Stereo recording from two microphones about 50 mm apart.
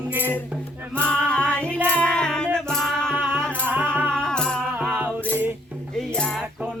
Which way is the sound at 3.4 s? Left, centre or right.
Left.